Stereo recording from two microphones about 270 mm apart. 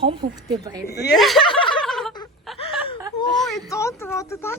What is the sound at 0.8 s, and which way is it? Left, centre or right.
Speech, left.